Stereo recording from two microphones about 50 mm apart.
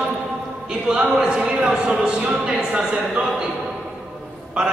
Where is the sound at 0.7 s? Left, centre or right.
Centre.